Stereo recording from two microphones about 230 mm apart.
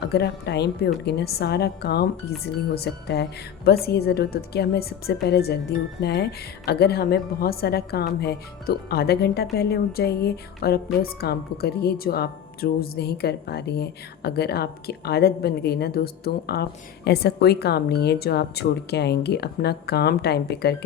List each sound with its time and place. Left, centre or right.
0.1 s a woman's voice: left